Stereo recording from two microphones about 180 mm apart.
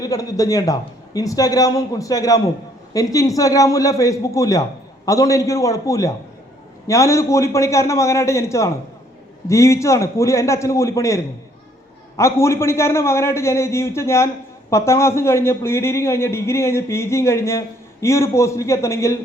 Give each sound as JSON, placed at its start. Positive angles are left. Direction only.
{"t": 0.0, "sound": "a man's voice", "side_deg": 20}